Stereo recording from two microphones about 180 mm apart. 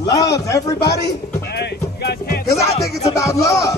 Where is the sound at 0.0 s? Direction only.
20° left (ahead or behind).